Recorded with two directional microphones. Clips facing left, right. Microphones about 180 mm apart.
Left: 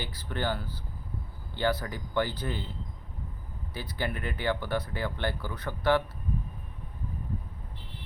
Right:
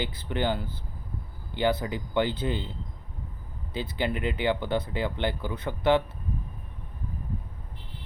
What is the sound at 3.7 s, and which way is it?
Speech, 20° right (ahead or behind).